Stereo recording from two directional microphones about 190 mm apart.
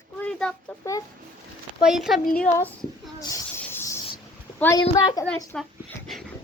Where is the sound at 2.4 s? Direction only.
10° left (ahead or behind).